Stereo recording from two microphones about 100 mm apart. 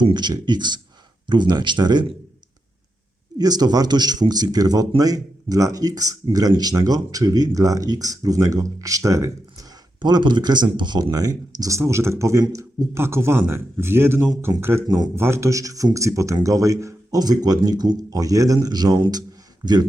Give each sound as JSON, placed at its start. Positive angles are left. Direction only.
{"t": 0.0, "sound": "speech", "side_deg": -45}
{"t": 3.3, "sound": "speech", "side_deg": -40}
{"t": 10.0, "sound": "speech", "side_deg": -50}
{"t": 11.8, "sound": "a man's voice", "side_deg": -25}
{"t": 14.8, "sound": "speech", "side_deg": -40}
{"t": 15.1, "sound": "speech", "side_deg": -25}